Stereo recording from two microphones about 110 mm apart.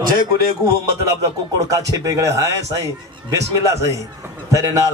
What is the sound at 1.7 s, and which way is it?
A man's voice, 30° right (ahead or behind).